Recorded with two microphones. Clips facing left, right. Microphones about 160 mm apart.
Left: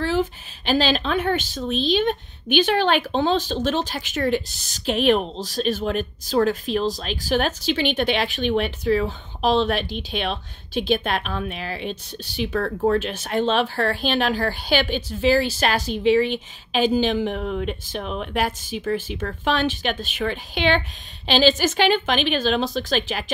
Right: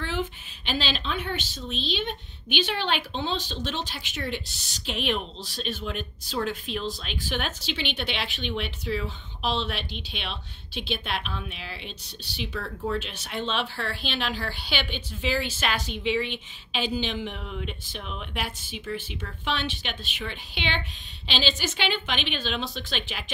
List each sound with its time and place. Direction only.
0.0 s a woman's voice: 40° left (ahead or behind)